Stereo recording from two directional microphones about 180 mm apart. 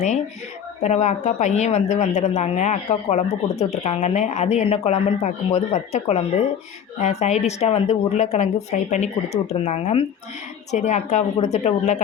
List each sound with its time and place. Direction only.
0.8 s speech: 40° left (ahead or behind)